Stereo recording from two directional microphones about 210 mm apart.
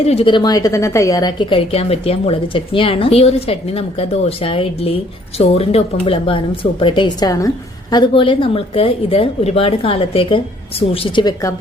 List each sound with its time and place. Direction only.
0.0 s speech: 30° left (ahead or behind)